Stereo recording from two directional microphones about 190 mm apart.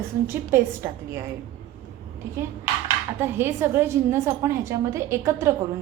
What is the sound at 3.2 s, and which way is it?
A woman's voice, 15° right (ahead or behind).